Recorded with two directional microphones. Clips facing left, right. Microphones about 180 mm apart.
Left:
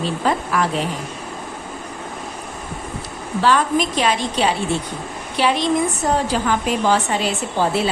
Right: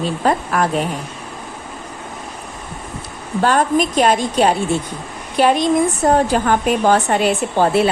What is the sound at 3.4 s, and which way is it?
A woman's voice, 50° right (ahead or behind).